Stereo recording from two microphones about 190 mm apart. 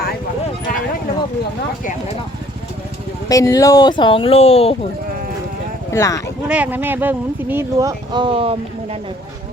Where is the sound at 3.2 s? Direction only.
20° left (ahead or behind).